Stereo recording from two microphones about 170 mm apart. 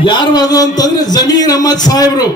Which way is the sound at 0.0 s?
25° left (ahead or behind).